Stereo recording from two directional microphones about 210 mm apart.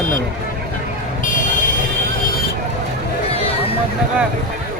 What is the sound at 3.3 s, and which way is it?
Vehicle, 30° left (ahead or behind).